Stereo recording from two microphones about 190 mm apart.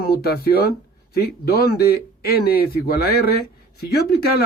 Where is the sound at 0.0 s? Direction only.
55° left (ahead or behind).